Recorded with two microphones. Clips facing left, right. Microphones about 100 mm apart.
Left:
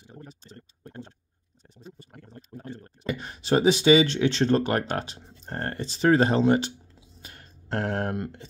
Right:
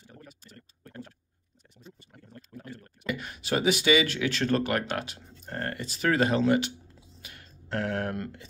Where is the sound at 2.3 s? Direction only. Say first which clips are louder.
Left 3 dB; 30° left (ahead or behind).